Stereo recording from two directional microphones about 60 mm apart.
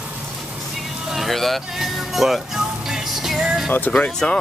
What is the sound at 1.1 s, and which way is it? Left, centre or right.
Speech, centre.